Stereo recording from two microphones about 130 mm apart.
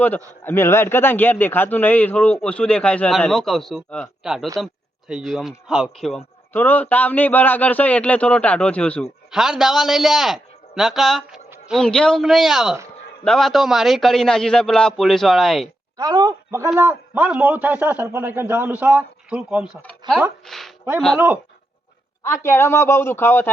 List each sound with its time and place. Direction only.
0.0 s a man's voice: 15° left (ahead or behind)
6.5 s a man's voice: 15° left (ahead or behind)
9.3 s a man's voice: 5° right (ahead or behind)
16.0 s a sound: 30° right (ahead or behind)
16.7 s a man's voice: 15° right (ahead or behind)
20.0 s speech: 35° right (ahead or behind)
20.5 s speech: centre (ahead or behind)
22.2 s speech: 20° left (ahead or behind)